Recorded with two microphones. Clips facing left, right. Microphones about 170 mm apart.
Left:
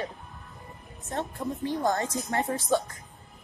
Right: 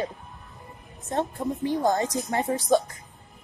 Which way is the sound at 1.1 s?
20° right (ahead or behind).